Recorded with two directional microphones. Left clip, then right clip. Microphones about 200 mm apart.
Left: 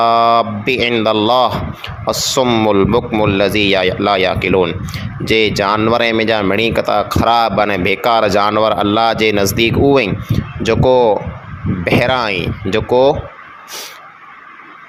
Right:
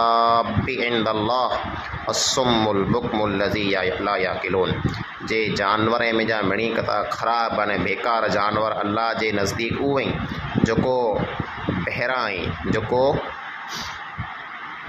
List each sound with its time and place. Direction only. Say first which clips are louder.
0.0 s speech: left 7 dB; 40° left (ahead or behind)